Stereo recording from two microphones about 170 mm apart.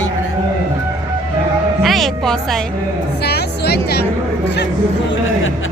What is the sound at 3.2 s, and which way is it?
Music, 70° left (ahead or behind).